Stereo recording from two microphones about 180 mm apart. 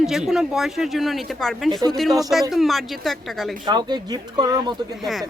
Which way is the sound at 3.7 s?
25° right (ahead or behind).